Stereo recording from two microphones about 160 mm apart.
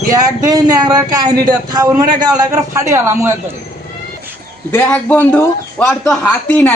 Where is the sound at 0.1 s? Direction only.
25° right (ahead or behind).